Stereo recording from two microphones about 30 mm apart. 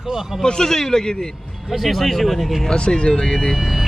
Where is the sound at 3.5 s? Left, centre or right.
Centre.